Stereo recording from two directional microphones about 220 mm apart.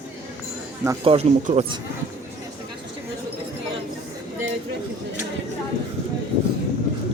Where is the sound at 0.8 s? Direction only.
25° right (ahead or behind).